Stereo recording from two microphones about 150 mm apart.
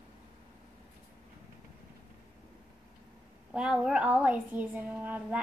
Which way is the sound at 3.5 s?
5° right (ahead or behind).